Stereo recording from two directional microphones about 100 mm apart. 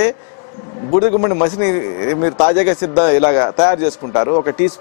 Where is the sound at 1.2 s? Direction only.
15° left (ahead or behind).